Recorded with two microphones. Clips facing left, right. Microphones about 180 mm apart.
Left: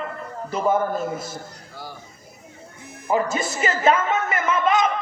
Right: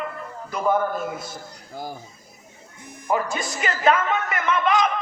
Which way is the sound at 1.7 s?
45° right (ahead or behind).